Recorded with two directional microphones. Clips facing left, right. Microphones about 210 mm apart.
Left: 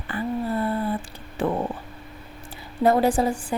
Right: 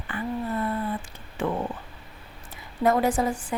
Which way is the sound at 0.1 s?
35° left (ahead or behind).